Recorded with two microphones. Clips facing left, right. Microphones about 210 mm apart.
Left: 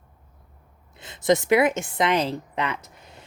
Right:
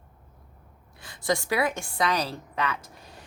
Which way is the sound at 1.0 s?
20° left (ahead or behind).